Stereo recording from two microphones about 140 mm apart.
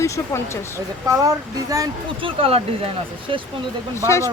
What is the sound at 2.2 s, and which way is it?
Speech, 40° right (ahead or behind).